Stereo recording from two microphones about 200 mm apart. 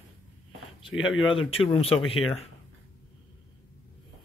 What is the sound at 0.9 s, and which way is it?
Speech, 75° left (ahead or behind).